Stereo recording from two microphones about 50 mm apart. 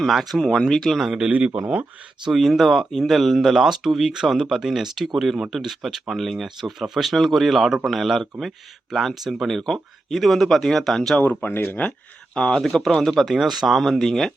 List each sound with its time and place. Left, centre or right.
0.0 s speech: centre
1.0 s a man's voice: centre
2.3 s speech: centre
11.4 s speech: left
11.9 s speech: centre
12.6 s speech: centre